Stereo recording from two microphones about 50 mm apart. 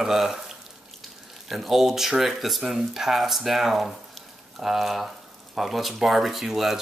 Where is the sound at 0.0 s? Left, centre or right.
Centre.